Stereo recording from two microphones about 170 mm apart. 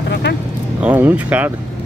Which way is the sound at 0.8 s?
10° right (ahead or behind).